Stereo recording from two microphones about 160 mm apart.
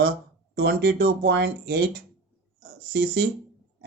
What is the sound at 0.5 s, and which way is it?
Speech, 85° right.